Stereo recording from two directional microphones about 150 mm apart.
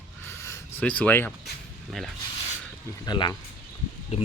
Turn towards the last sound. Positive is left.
turn(degrees=40)  # may be behind; listen again after turning